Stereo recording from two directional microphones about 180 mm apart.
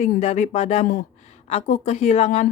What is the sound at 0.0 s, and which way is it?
A woman's voice, 40° left (ahead or behind).